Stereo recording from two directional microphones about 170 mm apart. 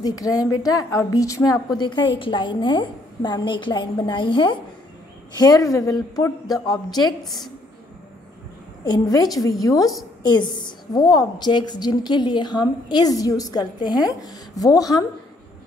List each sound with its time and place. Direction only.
0.0 s a woman's voice: 20° left (ahead or behind)
7.2 s a woman's voice: centre (ahead or behind)
8.8 s a woman's voice: 25° left (ahead or behind)